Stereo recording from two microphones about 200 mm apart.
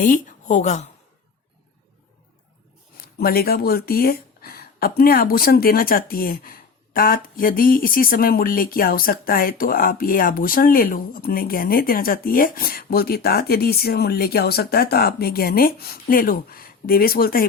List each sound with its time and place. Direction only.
0.0 s a woman's voice: 40° left (ahead or behind)
3.0 s speech: 50° left (ahead or behind)